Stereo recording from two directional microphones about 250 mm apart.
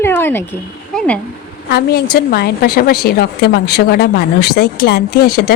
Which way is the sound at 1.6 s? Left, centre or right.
Left.